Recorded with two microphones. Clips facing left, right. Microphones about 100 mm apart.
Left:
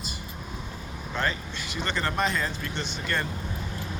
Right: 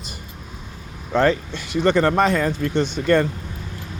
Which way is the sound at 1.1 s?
65° right (ahead or behind).